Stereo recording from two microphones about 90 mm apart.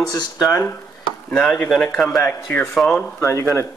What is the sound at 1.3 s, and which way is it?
Speech, 5° left (ahead or behind).